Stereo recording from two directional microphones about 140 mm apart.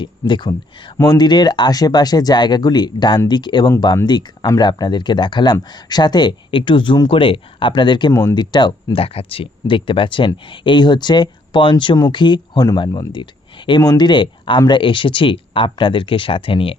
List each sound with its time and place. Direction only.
0.0 s speech: 35° left (ahead or behind)